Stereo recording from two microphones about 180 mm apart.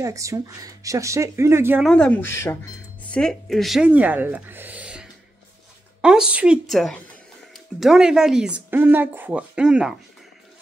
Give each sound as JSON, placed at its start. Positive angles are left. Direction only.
{"t": 0.0, "sound": "speech", "side_deg": -15}
{"t": 1.9, "sound": "speech", "side_deg": 5}